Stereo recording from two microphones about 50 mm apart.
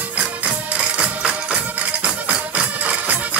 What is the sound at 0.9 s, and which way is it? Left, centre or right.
Music, right.